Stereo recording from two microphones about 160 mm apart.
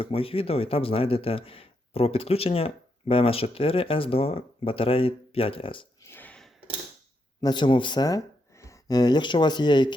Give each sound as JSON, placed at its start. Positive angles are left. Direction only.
{"t": 0.0, "sound": "speech", "side_deg": 35}
{"t": 6.1, "sound": "a sound", "side_deg": 10}
{"t": 7.4, "sound": "speech", "side_deg": 30}